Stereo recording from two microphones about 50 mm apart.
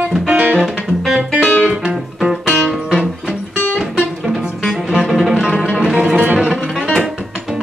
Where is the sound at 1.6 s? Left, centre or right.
Centre.